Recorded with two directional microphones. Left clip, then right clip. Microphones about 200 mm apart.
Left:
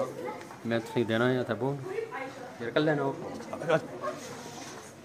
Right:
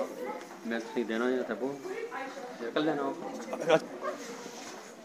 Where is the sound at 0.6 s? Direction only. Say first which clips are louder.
Left 4 dB; 55° left (ahead or behind).